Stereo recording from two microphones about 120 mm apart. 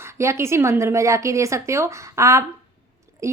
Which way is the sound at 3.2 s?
25° right (ahead or behind).